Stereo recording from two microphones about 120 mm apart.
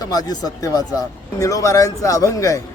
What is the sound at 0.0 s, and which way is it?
Speech, 30° left (ahead or behind).